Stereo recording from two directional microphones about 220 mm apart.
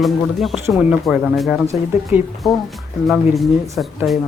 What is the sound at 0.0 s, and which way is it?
Speech, centre (ahead or behind).